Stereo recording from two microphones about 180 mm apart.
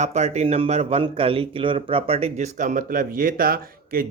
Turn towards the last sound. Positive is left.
turn(degrees=-55)  # may be behind; listen again after turning